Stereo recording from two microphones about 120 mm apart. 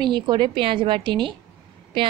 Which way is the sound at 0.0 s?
40° right (ahead or behind).